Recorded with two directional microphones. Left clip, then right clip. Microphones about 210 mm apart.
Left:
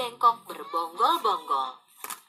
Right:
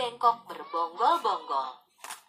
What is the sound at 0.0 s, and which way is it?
Speech, 25° left (ahead or behind).